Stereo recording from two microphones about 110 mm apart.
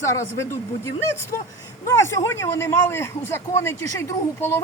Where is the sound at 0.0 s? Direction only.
25° left (ahead or behind).